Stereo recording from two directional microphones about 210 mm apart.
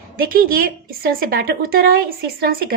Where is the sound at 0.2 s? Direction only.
45° right (ahead or behind).